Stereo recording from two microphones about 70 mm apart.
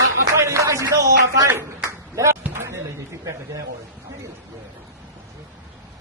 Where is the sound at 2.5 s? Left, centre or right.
Right.